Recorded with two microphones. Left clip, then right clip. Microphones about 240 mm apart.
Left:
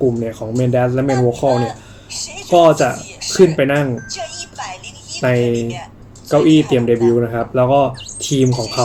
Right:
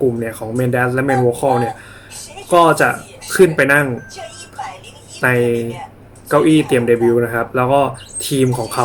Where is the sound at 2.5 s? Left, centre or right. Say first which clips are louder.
Even; centre.